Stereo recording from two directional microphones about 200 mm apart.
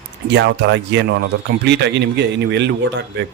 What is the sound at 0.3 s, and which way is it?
A man's voice, 60° right (ahead or behind).